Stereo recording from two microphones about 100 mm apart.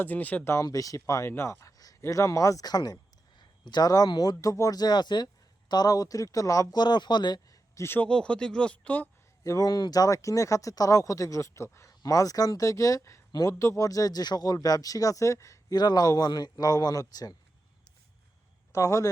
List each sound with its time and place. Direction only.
0.0 s speech: 15° left (ahead or behind)
0.5 s speech: 35° left (ahead or behind)
7.8 s speech: 25° left (ahead or behind)
8.0 s speech: 10° left (ahead or behind)
9.4 s speech: 35° left (ahead or behind)
15.8 s speech: 45° left (ahead or behind)
18.7 s speech: 30° left (ahead or behind)